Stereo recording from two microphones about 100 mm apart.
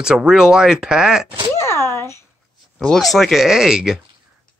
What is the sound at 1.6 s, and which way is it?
Speech, 30° left (ahead or behind).